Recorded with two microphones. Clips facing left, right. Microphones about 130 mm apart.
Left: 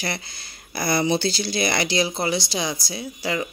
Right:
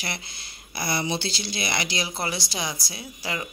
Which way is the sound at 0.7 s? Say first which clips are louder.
Left 6 dB; 45° left (ahead or behind).